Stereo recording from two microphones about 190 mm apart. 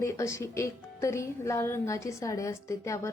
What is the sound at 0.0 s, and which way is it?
A woman's voice, 15° left (ahead or behind).